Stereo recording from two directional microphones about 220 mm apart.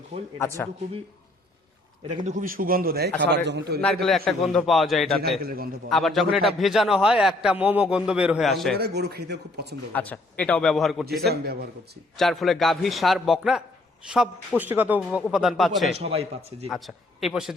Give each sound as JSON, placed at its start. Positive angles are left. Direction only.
{"t": 0.3, "sound": "speech", "side_deg": 10}
{"t": 2.0, "sound": "a man's voice", "side_deg": -35}
{"t": 3.8, "sound": "a man's voice", "side_deg": 5}
{"t": 5.4, "sound": "a man's voice", "side_deg": -40}
{"t": 5.9, "sound": "a man's voice", "side_deg": 0}
{"t": 8.8, "sound": "speech", "side_deg": -50}
{"t": 9.9, "sound": "a man's voice", "side_deg": 5}
{"t": 12.1, "sound": "a man's voice", "side_deg": 0}
{"t": 14.6, "sound": "a man's voice", "side_deg": -10}
{"t": 16.0, "sound": "a man's voice", "side_deg": -30}
{"t": 16.6, "sound": "a man's voice", "side_deg": 0}